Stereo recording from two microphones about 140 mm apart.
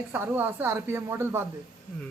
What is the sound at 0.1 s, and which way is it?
A woman's voice, 15° right (ahead or behind).